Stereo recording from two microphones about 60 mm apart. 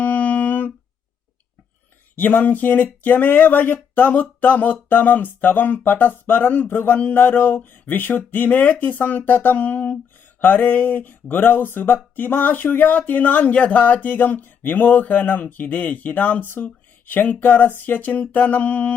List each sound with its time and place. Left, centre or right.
0.0 s humming: left
2.1 s speech: left